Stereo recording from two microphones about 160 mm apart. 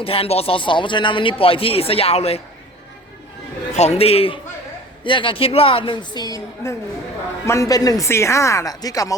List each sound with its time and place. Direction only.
0.0 s speech: 35° left (ahead or behind)
3.8 s speech: 40° left (ahead or behind); by 9.1 s 20° left (ahead or behind)